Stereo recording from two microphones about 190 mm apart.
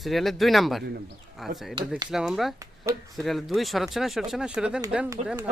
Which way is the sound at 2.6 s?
15° right (ahead or behind).